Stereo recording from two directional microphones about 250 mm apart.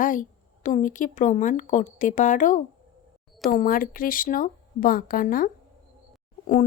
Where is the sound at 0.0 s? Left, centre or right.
Left.